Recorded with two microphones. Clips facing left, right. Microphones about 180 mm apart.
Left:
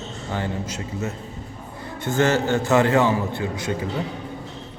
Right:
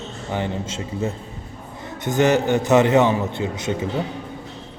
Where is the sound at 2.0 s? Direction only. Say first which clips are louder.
Right 2 dB; 15° right (ahead or behind).